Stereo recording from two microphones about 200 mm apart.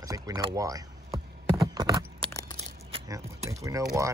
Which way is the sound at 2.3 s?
15° left (ahead or behind).